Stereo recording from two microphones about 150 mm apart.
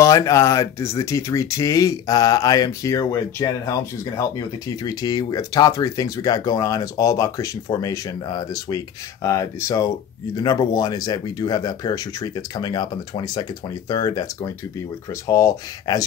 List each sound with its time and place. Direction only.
0.0 s speech: 20° left (ahead or behind)
4.8 s speech: 25° left (ahead or behind)